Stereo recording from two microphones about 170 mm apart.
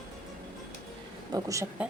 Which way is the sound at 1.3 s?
20° right (ahead or behind).